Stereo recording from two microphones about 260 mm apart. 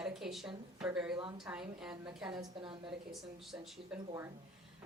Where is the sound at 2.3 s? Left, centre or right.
Centre.